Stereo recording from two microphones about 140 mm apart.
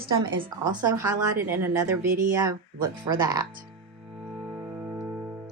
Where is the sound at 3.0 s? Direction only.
30° right (ahead or behind).